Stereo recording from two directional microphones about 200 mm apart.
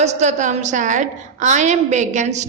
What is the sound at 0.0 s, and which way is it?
A woman's voice, 35° right (ahead or behind).